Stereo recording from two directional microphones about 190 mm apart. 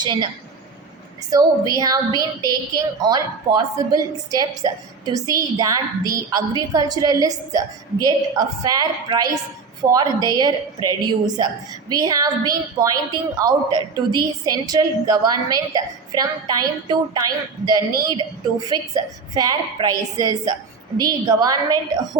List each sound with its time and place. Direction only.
0.0 s a woman's voice: 25° right (ahead or behind)
1.3 s a woman's voice: 20° right (ahead or behind)